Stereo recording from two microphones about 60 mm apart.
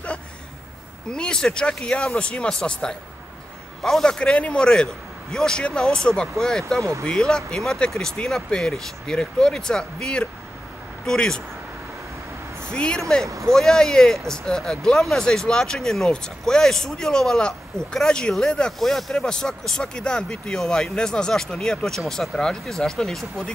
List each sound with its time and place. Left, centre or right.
1.1 s speech: centre
6.8 s speech: right
7.1 s speech: centre
12.6 s speech: centre